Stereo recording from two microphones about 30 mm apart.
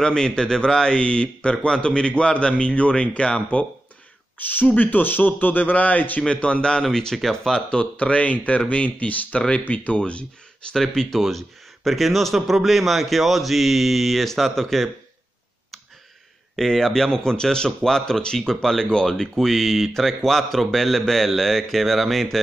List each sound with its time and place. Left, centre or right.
0.0 s a man's voice: left
4.4 s a man's voice: left
6.3 s a man's voice: left
7.2 s speech: centre
7.7 s speech: left
9.0 s speech: left
9.9 s a man's voice: left
10.7 s speech: centre
11.1 s a man's voice: centre
16.5 s speech: centre